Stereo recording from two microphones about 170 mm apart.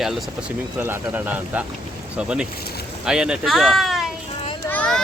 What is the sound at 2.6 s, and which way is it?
Speech, 65° left (ahead or behind).